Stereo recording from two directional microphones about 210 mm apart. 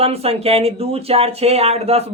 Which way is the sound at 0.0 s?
30° right (ahead or behind).